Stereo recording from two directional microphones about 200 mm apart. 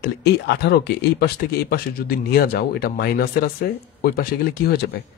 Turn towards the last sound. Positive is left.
turn(degrees=50)  # may be behind; listen again after turning